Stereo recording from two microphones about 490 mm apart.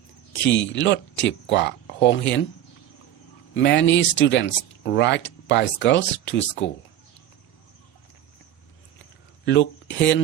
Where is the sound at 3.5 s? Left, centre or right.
Left.